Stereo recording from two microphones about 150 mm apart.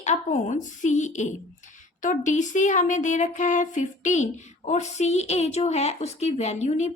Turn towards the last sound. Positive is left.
turn(degrees=50)  # may be behind; listen again after turning